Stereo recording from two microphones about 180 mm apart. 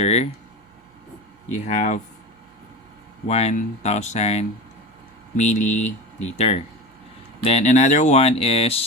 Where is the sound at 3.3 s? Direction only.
40° left (ahead or behind).